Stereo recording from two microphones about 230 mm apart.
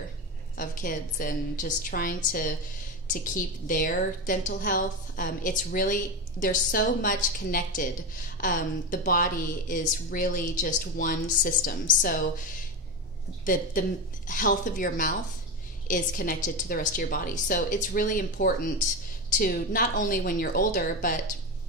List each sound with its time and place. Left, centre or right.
0.6 s speech: left
13.5 s speech: left